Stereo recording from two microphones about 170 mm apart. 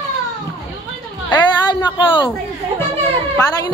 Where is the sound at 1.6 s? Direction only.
25° left (ahead or behind).